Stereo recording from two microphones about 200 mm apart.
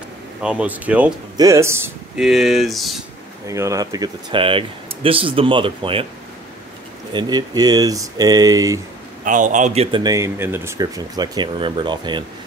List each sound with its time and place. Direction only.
0.4 s speech: 5° right (ahead or behind)
2.1 s speech: centre (ahead or behind)
3.4 s speech: 15° right (ahead or behind)
7.1 s speech: 20° right (ahead or behind)
9.2 s speech: 40° right (ahead or behind); by 12.3 s 20° right (ahead or behind)